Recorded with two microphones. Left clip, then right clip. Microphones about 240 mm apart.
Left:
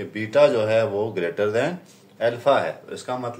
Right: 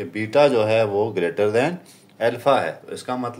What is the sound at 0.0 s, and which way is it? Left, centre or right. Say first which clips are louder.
Speech: even; right.